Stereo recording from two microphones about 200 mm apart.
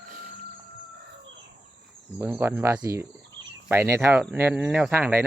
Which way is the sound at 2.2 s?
10° right (ahead or behind).